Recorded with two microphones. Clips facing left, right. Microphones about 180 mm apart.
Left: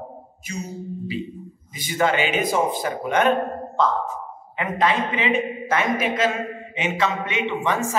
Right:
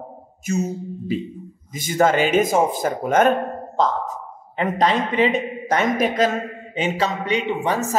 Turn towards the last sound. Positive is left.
turn(degrees=-35)  # may be behind; listen again after turning